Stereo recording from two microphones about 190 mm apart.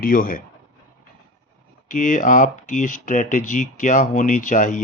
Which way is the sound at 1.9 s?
40° left (ahead or behind).